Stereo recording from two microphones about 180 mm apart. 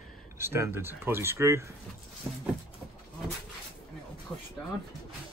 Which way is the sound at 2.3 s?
Centre (ahead or behind).